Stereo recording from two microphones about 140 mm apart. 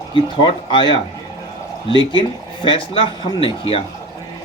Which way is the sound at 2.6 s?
40° left (ahead or behind).